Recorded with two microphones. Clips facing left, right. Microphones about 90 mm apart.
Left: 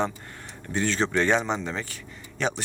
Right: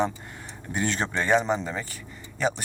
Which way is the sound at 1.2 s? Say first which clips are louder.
Right 5 dB; 5° right (ahead or behind).